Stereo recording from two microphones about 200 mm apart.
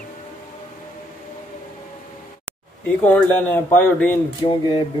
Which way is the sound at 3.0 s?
10° left (ahead or behind).